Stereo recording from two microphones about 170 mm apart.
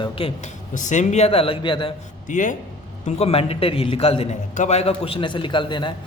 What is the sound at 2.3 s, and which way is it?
Speech, 50° left (ahead or behind).